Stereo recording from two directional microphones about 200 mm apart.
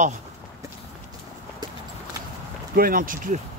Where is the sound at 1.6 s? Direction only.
20° right (ahead or behind).